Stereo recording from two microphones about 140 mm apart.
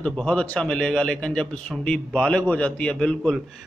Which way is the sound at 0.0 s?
5° left (ahead or behind).